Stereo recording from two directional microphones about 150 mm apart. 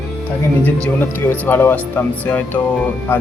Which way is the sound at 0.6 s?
10° left (ahead or behind).